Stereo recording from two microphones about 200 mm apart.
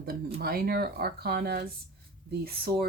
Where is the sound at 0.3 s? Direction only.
50° right (ahead or behind).